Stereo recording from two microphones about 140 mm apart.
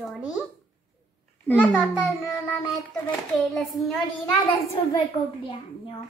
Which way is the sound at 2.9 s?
5° left (ahead or behind).